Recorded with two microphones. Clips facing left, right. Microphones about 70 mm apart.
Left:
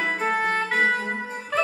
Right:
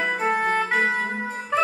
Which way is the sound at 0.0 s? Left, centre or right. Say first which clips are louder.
Right 1 dB; centre.